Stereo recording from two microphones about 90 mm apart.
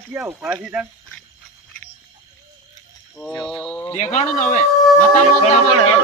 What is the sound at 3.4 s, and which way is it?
Speech, 10° left (ahead or behind).